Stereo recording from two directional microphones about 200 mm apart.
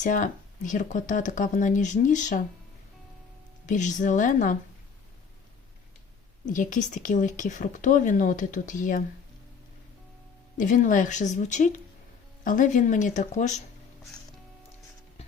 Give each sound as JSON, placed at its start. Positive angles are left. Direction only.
{"t": 0.0, "sound": "a woman's voice", "side_deg": 40}
{"t": 3.7, "sound": "a woman's voice", "side_deg": 40}
{"t": 6.5, "sound": "a woman's voice", "side_deg": 40}
{"t": 10.6, "sound": "a woman's voice", "side_deg": 40}